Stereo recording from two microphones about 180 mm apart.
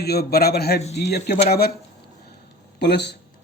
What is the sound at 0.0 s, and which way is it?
A man's voice, 60° left (ahead or behind).